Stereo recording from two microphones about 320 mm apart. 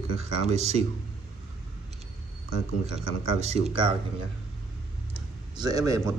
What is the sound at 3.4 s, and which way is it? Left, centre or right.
Speech, centre.